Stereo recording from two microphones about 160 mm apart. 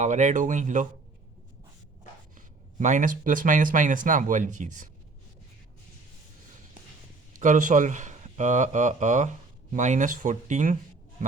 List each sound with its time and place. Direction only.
0.0 s speech: 50° right (ahead or behind)
2.7 s speech: 50° right (ahead or behind)
7.3 s speech: 50° right (ahead or behind)